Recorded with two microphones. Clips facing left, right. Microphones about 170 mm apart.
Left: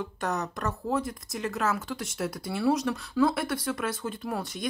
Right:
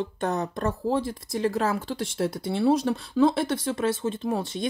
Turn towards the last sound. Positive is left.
turn(degrees=-25)  # may be behind; listen again after turning